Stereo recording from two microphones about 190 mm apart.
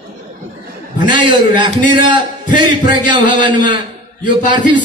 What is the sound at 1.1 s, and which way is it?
A man's voice, 25° right (ahead or behind).